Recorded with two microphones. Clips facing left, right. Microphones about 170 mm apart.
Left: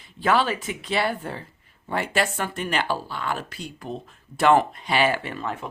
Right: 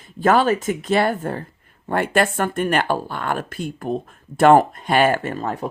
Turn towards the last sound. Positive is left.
turn(degrees=-40)  # may be behind; listen again after turning